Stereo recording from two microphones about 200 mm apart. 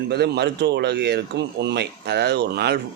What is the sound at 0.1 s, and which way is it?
Speech, 55° right (ahead or behind).